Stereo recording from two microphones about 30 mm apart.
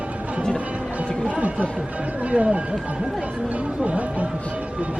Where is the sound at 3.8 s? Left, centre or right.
Right.